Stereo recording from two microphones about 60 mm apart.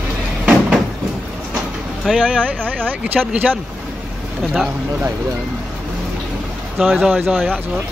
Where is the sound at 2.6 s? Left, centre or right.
Right.